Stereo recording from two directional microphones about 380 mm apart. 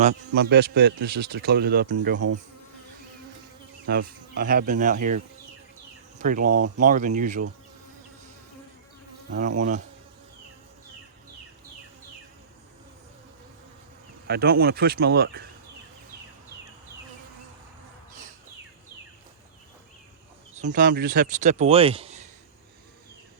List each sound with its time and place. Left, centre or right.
0.0 s a man's voice: right
3.8 s a man's voice: right
9.6 s a man's voice: centre
14.3 s a man's voice: right
20.5 s a man's voice: centre